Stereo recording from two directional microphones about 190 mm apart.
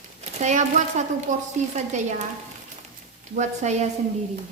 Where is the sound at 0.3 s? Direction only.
40° right (ahead or behind).